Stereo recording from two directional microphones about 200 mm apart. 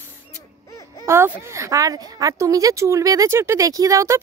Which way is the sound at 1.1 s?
15° right (ahead or behind).